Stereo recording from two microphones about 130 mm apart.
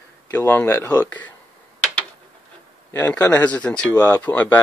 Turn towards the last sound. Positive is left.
turn(degrees=10)  # may be behind; listen again after turning